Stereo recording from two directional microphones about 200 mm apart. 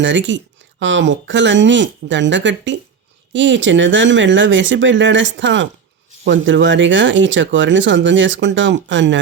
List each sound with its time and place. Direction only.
0.0 s speech: 65° right (ahead or behind)